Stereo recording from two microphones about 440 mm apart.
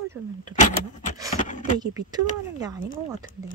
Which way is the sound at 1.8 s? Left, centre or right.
Centre.